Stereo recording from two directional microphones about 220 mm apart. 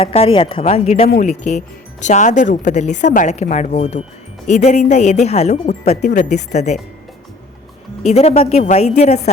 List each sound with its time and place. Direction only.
0.0 s speech: 25° left (ahead or behind)
8.0 s speech: 30° left (ahead or behind)